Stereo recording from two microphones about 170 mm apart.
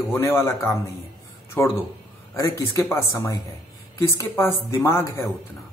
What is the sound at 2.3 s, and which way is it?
Speech, 20° left (ahead or behind).